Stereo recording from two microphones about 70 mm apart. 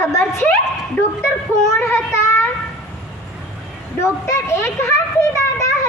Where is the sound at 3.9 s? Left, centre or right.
Left.